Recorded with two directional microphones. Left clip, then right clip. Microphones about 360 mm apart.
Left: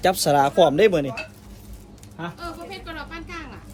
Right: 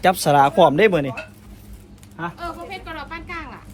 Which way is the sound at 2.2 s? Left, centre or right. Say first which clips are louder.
Right 4 dB; centre.